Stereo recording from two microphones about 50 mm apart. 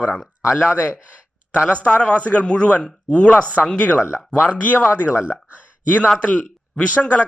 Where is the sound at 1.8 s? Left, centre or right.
Left.